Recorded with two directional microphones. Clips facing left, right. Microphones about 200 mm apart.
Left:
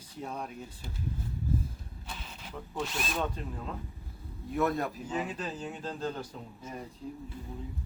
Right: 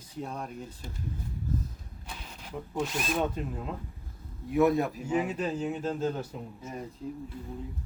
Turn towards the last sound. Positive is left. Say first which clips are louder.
# right 3 dB
turn(degrees=-5)  # may be behind; listen again after turning